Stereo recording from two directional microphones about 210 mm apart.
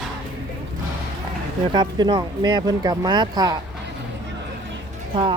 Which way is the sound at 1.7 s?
20° right (ahead or behind).